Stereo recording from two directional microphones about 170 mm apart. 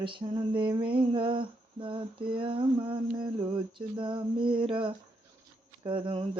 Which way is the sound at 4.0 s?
30° right (ahead or behind).